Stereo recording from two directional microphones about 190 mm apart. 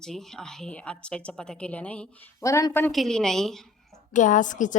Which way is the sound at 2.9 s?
Centre (ahead or behind).